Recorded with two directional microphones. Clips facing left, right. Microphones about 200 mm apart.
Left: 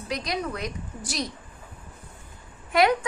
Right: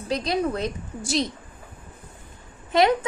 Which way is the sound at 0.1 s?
30° right (ahead or behind).